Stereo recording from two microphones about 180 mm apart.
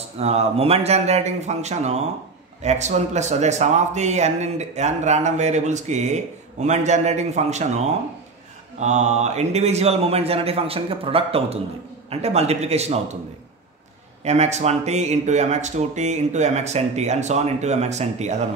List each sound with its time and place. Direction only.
0.2 s speech: 35° right (ahead or behind)
14.2 s speech: 40° right (ahead or behind)